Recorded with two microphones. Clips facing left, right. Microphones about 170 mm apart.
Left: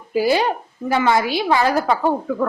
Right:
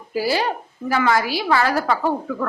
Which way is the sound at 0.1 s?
20° left (ahead or behind).